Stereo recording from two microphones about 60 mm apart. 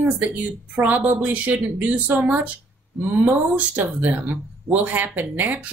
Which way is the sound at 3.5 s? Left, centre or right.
Right.